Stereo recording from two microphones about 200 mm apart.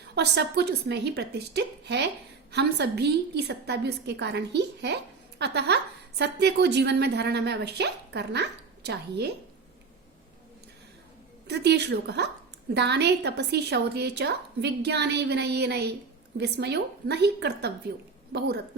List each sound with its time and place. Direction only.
0.1 s a woman's voice: 60° right (ahead or behind)
11.4 s a woman's voice: 55° right (ahead or behind)